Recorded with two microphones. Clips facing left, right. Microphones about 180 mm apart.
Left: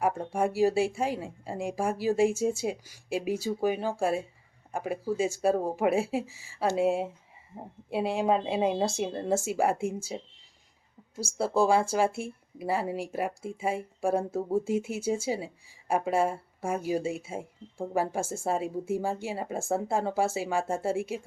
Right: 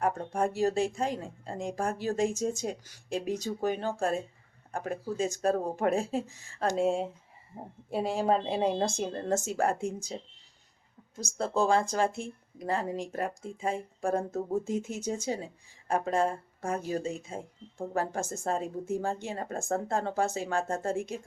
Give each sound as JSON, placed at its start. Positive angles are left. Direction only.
{"t": 0.0, "sound": "speech", "side_deg": 10}